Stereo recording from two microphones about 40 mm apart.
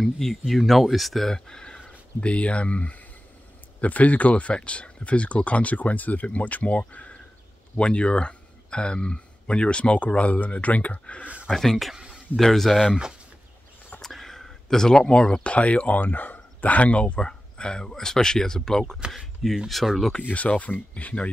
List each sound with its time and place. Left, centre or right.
0.0 s speech: centre
1.3 s speech: centre
1.9 s speech: left
11.5 s speech: centre
12.8 s speech: centre
14.0 s a sound: centre
15.4 s speech: left; by 19.6 s centre
20.2 s speech: left